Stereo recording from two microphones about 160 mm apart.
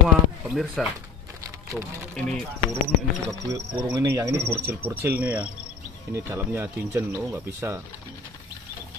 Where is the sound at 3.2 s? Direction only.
20° right (ahead or behind).